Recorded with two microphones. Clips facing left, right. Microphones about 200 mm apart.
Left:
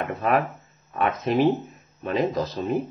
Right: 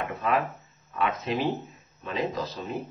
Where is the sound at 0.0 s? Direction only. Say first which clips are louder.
Left 4 dB; 50° left (ahead or behind).